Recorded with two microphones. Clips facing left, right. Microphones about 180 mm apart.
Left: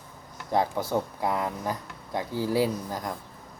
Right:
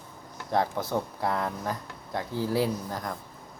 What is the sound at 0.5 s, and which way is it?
Speech, 10° left (ahead or behind).